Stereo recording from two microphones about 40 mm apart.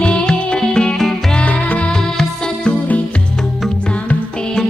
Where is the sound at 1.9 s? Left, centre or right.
Centre.